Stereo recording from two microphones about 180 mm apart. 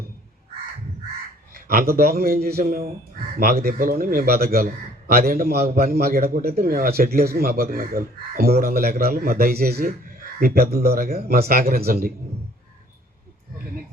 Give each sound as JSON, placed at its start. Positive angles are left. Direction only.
{"t": 1.5, "sound": "speech", "side_deg": -55}